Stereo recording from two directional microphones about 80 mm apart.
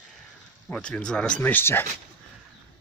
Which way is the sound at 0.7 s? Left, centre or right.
Centre.